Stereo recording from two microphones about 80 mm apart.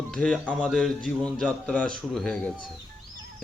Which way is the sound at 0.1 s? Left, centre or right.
Centre.